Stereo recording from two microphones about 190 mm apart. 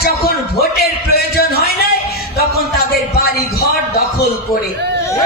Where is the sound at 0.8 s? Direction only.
55° left (ahead or behind).